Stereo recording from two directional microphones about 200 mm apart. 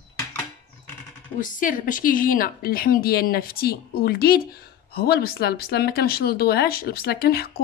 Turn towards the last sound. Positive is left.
turn(degrees=50)  # may be behind; listen again after turning